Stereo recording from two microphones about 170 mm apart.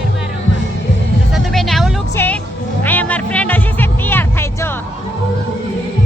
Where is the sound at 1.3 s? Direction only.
Centre (ahead or behind).